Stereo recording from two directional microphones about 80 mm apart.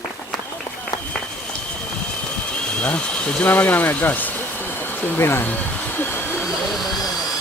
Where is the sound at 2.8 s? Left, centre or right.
Centre.